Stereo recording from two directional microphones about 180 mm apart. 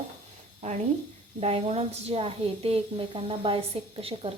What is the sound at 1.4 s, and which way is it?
A woman's voice, 35° right (ahead or behind).